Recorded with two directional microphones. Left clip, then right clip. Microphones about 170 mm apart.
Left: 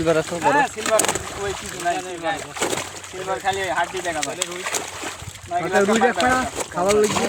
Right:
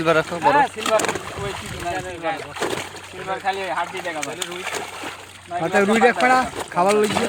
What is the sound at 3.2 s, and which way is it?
Speech, 15° left (ahead or behind).